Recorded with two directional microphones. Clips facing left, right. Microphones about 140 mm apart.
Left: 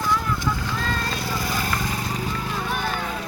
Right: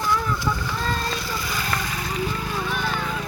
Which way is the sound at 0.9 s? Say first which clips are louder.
Left 1 dB; 45° left (ahead or behind).